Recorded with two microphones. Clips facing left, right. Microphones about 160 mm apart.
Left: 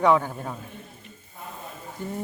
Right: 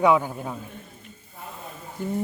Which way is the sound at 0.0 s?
5° right (ahead or behind).